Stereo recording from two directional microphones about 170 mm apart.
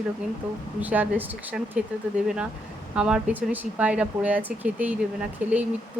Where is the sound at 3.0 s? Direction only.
5° right (ahead or behind).